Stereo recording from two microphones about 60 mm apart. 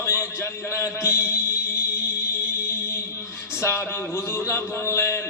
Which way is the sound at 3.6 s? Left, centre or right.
Left.